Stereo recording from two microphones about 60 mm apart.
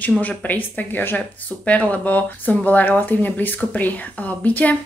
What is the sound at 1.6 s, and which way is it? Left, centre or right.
Speech, left.